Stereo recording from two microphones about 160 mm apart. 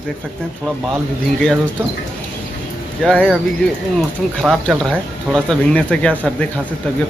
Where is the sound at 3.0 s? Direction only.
5° left (ahead or behind).